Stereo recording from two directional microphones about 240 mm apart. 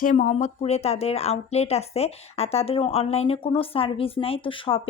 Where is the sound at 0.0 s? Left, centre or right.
Left.